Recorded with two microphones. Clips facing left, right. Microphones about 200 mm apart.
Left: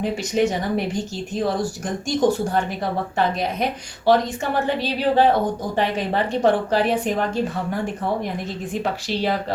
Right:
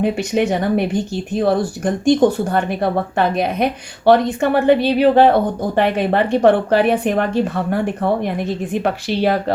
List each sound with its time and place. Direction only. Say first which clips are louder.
0.0 s a woman's voice: right 3 dB; 60° right (ahead or behind)
8.7 s a woman's voice: right 3 dB; 60° right (ahead or behind)